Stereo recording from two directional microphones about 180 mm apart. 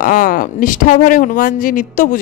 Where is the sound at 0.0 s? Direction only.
50° left (ahead or behind).